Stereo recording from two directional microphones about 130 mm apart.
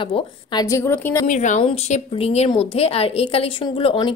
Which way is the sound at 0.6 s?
20° left (ahead or behind).